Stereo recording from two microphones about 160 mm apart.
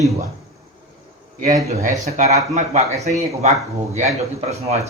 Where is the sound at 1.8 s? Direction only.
50° right (ahead or behind).